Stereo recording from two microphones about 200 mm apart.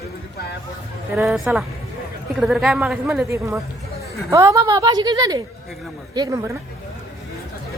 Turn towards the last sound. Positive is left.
turn(degrees=-15)  # may be behind; listen again after turning